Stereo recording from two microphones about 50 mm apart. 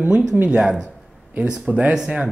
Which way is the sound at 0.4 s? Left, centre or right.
Right.